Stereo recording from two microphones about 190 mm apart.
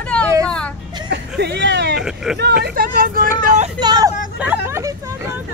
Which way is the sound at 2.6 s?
50° right (ahead or behind).